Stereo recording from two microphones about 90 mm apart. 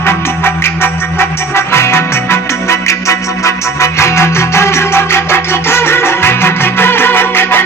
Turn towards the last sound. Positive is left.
turn(degrees=25)  # may be behind; listen again after turning